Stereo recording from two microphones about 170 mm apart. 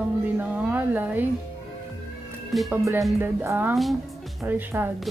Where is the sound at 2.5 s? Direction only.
Centre (ahead or behind).